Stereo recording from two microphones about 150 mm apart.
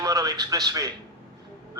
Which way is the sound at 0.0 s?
25° right (ahead or behind).